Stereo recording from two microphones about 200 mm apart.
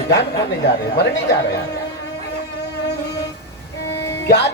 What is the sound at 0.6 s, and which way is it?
Speech, 60° left (ahead or behind).